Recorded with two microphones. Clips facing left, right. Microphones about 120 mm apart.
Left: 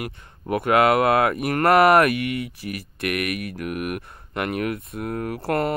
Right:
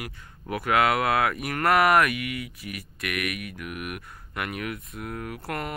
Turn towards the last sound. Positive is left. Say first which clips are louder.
# left 9 dB
turn(degrees=30)  # may be behind; listen again after turning